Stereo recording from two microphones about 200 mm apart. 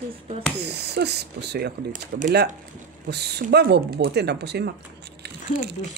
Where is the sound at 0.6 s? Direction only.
55° right (ahead or behind); by 2.5 s 40° right (ahead or behind).